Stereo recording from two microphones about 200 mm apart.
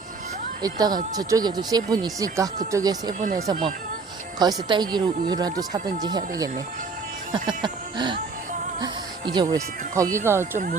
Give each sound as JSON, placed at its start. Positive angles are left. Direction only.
{"t": 0.6, "sound": "speech", "side_deg": -20}